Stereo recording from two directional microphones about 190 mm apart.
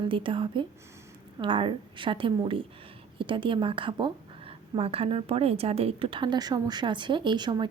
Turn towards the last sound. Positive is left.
turn(degrees=-25)  # may be behind; listen again after turning